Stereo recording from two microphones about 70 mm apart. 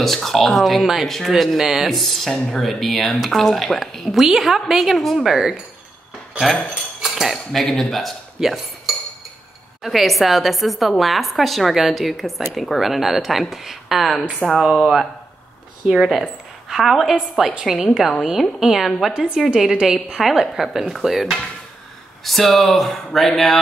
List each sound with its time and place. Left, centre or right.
0.0 s speech: centre
6.7 s cutlery: centre
9.8 s speech: centre
19.1 s speech: centre